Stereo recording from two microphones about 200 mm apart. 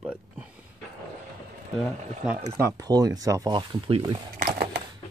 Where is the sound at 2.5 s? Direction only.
15° right (ahead or behind).